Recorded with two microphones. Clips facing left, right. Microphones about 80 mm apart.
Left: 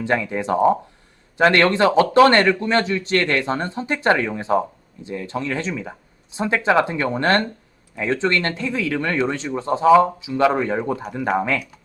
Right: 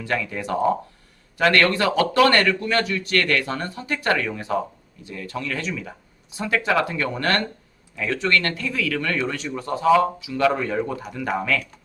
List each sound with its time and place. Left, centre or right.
0.0 s speech: left